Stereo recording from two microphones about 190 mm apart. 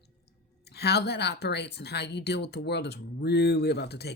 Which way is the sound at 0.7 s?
60° left (ahead or behind).